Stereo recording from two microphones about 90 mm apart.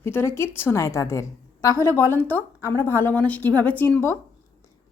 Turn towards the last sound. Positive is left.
turn(degrees=25)  # may be behind; listen again after turning